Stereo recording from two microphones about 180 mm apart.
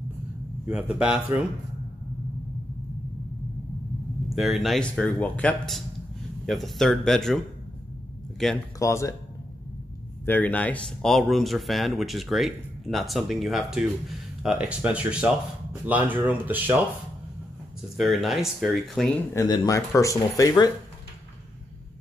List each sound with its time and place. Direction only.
0.7 s speech: 5° right (ahead or behind)
4.4 s speech: centre (ahead or behind)
8.7 s speech: 15° left (ahead or behind)
10.2 s speech: 10° left (ahead or behind); by 16.8 s 10° right (ahead or behind)
17.9 s speech: centre (ahead or behind)
19.3 s speech: 20° left (ahead or behind)